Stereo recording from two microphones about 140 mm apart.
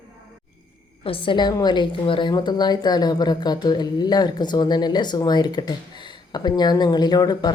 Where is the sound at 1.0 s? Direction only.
40° left (ahead or behind).